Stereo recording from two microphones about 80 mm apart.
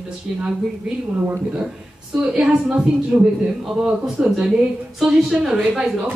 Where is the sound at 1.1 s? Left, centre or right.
Right.